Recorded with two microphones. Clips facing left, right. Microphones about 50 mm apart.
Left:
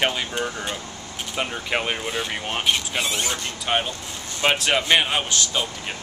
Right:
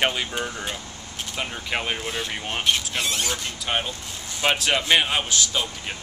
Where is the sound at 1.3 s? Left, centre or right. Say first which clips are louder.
Left 3 dB; centre.